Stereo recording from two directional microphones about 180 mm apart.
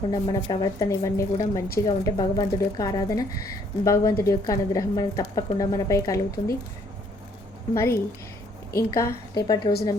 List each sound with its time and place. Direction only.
0.1 s a woman's voice: 25° left (ahead or behind)
6.4 s speech: 35° left (ahead or behind)
7.7 s a woman's voice: 15° left (ahead or behind)